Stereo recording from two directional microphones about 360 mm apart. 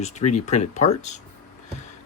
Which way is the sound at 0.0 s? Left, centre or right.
Centre.